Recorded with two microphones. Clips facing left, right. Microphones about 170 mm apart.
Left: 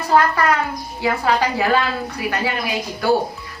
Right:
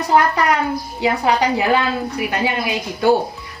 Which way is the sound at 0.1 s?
20° right (ahead or behind).